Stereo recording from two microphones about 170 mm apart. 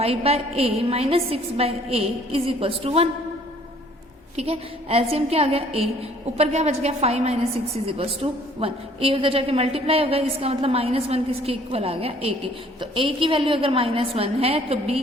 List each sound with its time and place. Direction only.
0.0 s a woman's voice: 35° right (ahead or behind)
4.4 s a woman's voice: 35° right (ahead or behind)